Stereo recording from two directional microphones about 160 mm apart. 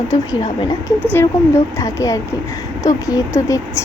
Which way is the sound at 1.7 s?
20° left (ahead or behind).